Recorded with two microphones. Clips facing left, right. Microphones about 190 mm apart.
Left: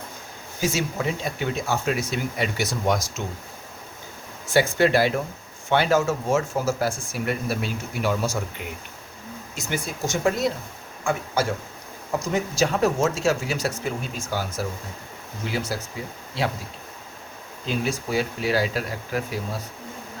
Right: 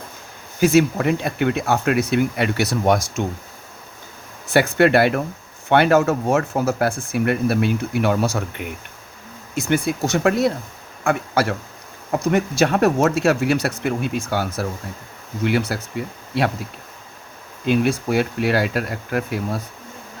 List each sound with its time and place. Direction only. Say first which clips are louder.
0.6 s speech: right 9 dB; 60° right (ahead or behind)
4.4 s speech: right 4 dB; 60° right (ahead or behind)
17.7 s speech: right 8 dB; 60° right (ahead or behind)